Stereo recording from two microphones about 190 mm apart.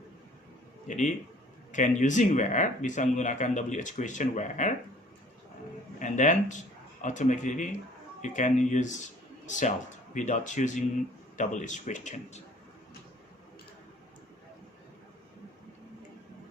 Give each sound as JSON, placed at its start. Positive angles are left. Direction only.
{"t": 0.9, "sound": "speech", "side_deg": 40}
{"t": 6.0, "sound": "speech", "side_deg": 40}